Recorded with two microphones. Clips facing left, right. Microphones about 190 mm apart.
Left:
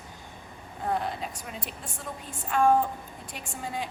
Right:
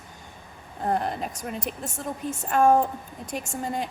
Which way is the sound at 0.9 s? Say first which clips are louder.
Right 3 dB; 45° right (ahead or behind).